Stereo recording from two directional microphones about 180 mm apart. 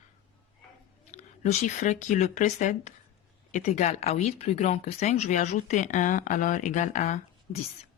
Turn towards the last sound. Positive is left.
turn(degrees=40)  # may be behind; listen again after turning